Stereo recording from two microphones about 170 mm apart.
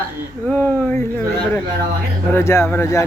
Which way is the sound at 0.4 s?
10° left (ahead or behind).